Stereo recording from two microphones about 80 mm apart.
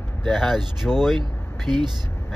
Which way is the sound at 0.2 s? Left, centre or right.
Centre.